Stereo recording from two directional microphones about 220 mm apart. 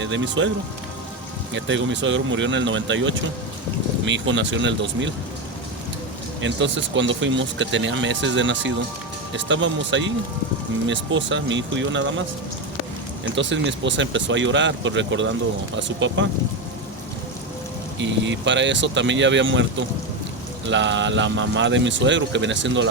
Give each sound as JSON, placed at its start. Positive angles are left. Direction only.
{"t": 0.0, "sound": "speech", "side_deg": -55}
{"t": 1.5, "sound": "speech", "side_deg": -55}
{"t": 6.4, "sound": "speech", "side_deg": -55}
{"t": 13.3, "sound": "speech", "side_deg": -55}
{"t": 18.0, "sound": "speech", "side_deg": -55}
{"t": 20.7, "sound": "speech", "side_deg": -55}